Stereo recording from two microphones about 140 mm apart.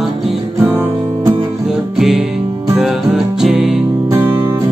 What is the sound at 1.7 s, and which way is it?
Music, 5° right (ahead or behind).